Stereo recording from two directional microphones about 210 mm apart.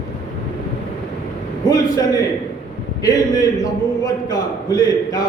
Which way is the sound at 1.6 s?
15° left (ahead or behind).